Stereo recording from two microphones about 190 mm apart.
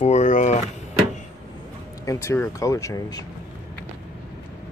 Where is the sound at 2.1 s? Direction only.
15° left (ahead or behind).